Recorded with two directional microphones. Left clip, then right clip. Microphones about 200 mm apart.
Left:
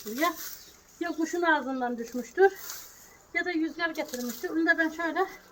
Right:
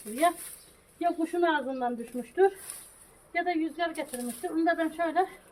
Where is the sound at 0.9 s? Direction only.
5° left (ahead or behind).